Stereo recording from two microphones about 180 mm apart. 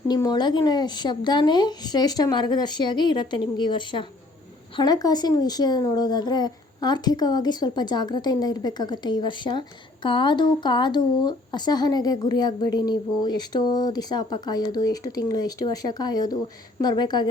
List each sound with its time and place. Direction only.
0.1 s speech: 20° left (ahead or behind)